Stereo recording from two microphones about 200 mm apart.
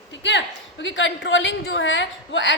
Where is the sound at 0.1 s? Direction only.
65° left (ahead or behind).